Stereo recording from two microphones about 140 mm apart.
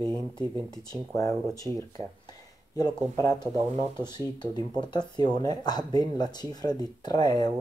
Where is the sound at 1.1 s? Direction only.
25° left (ahead or behind).